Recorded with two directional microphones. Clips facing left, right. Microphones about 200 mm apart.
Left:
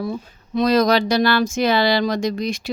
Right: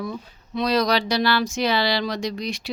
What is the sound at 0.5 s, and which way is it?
Speech, 45° left (ahead or behind).